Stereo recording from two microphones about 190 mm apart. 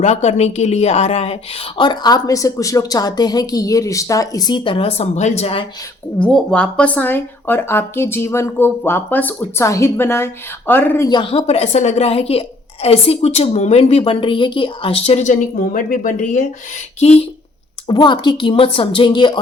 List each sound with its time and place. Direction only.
0.0 s speech: 35° left (ahead or behind)
6.1 s speech: 5° left (ahead or behind); by 17.2 s 35° left (ahead or behind)
17.8 s speech: 25° left (ahead or behind)